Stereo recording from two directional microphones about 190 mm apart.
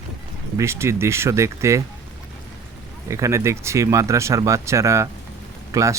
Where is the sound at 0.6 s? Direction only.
15° right (ahead or behind).